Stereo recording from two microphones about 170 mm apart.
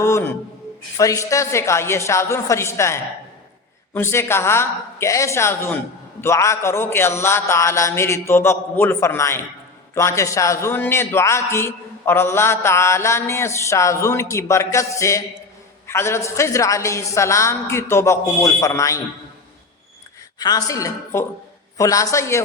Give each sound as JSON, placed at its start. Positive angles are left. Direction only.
{"t": 0.0, "sound": "a man's voice", "side_deg": 15}
{"t": 20.4, "sound": "a woman's voice", "side_deg": 20}